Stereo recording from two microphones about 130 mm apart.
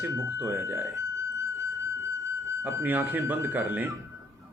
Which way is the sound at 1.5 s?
20° right (ahead or behind).